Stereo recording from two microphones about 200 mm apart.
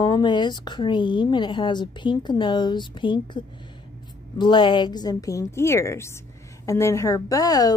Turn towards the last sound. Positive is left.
turn(degrees=20)  # may be behind; listen again after turning